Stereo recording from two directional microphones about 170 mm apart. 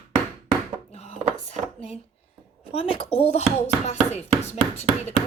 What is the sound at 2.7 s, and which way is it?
Speech, 30° left (ahead or behind).